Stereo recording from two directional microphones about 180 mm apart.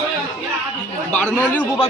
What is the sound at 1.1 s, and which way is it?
Speech, 5° left (ahead or behind).